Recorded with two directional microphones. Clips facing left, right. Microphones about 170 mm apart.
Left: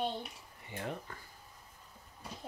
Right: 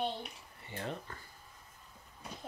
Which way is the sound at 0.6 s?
15° left (ahead or behind).